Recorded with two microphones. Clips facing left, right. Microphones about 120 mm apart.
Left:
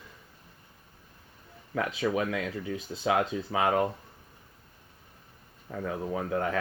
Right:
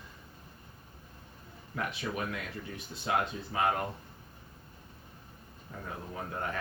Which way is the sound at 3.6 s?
90° left.